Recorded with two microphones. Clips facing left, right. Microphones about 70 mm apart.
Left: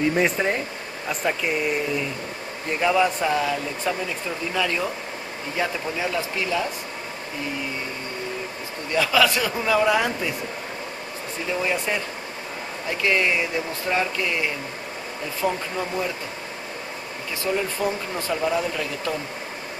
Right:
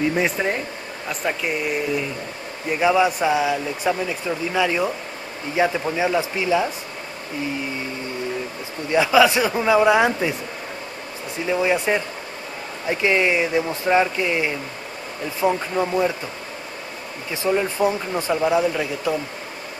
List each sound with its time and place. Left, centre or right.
0.1 s speech: centre
8.9 s speech: centre
11.5 s speech: centre
17.3 s speech: right